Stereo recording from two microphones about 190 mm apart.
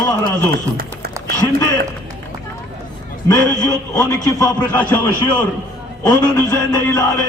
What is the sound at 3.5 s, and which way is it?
A man's voice, 20° left (ahead or behind).